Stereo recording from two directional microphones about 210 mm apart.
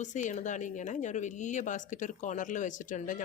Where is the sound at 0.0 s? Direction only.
35° left (ahead or behind).